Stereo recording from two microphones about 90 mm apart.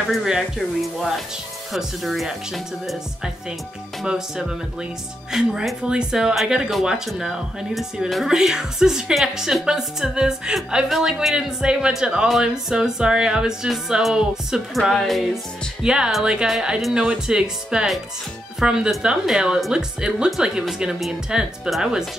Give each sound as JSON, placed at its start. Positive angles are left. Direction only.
{"t": 0.0, "sound": "speech", "side_deg": 0}
{"t": 4.0, "sound": "speech", "side_deg": -10}